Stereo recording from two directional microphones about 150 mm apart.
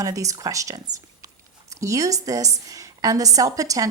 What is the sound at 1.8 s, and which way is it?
A woman's voice, 20° right (ahead or behind).